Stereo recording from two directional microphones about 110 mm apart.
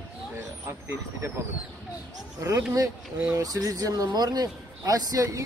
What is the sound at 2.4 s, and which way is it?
Speech, 30° right (ahead or behind).